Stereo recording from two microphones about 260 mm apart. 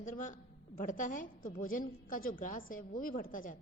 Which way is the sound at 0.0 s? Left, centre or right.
Left.